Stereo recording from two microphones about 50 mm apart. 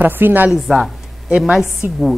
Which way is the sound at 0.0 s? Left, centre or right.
Right.